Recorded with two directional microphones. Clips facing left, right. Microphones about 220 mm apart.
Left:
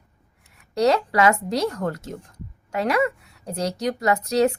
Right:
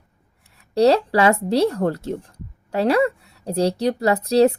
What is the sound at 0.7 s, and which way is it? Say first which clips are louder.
A woman's voice: right 4 dB; 35° right (ahead or behind).